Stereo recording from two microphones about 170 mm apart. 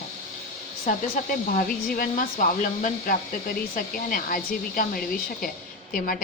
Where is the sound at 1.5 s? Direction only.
55° left (ahead or behind).